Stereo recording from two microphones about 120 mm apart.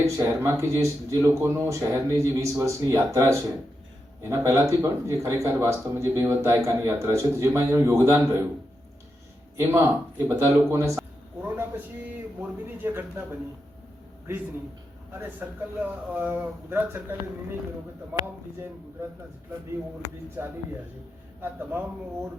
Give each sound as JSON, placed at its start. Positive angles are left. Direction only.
{"t": 0.0, "sound": "speech", "side_deg": -25}
{"t": 9.6, "sound": "speech", "side_deg": -25}
{"t": 12.4, "sound": "speech", "side_deg": -15}
{"t": 15.2, "sound": "speech", "side_deg": -15}
{"t": 20.4, "sound": "speech", "side_deg": -20}